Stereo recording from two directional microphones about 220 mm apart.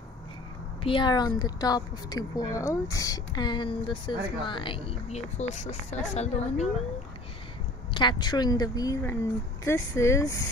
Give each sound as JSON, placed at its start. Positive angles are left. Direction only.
{"t": 0.8, "sound": "a woman's voice", "side_deg": 20}
{"t": 7.9, "sound": "a woman's voice", "side_deg": 20}